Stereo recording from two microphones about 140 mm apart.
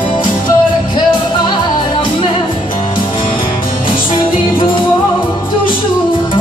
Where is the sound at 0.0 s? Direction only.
35° left (ahead or behind).